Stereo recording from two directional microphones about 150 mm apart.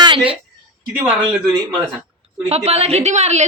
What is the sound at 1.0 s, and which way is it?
Speech, 5° right (ahead or behind).